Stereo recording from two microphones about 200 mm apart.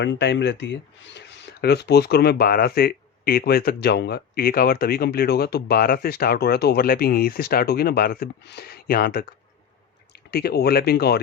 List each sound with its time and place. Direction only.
0.0 s speech: 60° left (ahead or behind)